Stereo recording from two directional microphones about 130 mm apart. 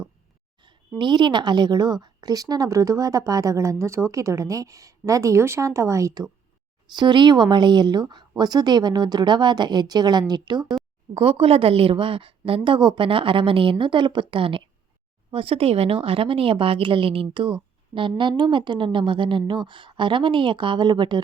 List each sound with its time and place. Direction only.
0.6 s a woman's voice: 35° right (ahead or behind)
11.1 s a woman's voice: 45° right (ahead or behind)